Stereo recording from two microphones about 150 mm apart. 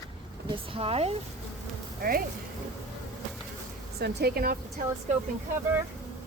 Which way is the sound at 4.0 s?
90° right.